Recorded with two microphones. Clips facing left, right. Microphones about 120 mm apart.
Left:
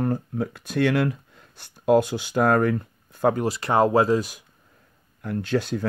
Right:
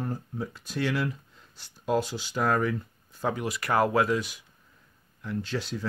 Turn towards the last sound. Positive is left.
turn(degrees=55)  # may be behind; listen again after turning